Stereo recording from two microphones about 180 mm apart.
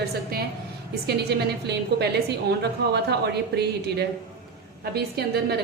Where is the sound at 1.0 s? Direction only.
65° right (ahead or behind).